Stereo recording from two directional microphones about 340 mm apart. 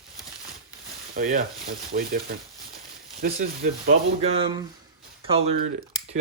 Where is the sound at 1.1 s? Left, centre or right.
Right.